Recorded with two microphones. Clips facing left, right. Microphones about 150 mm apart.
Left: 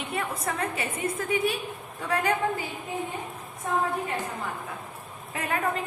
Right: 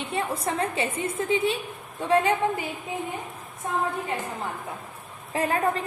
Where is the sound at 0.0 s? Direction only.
30° right (ahead or behind).